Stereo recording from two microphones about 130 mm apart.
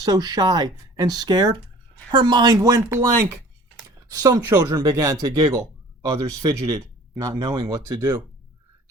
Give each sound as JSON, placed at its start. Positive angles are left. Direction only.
{"t": 0.0, "sound": "speech", "side_deg": -30}